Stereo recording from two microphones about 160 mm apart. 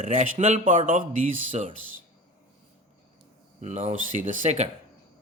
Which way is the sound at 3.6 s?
45° right (ahead or behind).